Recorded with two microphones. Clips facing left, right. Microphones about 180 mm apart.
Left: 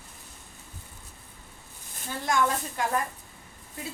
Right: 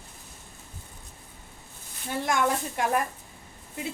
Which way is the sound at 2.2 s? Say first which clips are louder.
Even; 20° right (ahead or behind).